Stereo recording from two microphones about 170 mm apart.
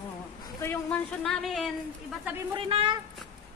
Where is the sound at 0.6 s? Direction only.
10° left (ahead or behind).